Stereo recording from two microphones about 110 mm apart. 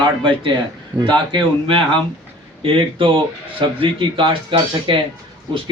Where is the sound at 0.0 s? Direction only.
45° right (ahead or behind).